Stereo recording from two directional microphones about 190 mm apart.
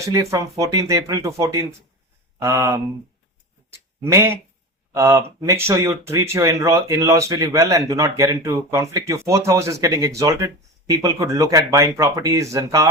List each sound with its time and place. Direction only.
0.0 s speech: 15° right (ahead or behind)
3.7 s a sound: 15° right (ahead or behind)
4.9 s speech: 15° right (ahead or behind)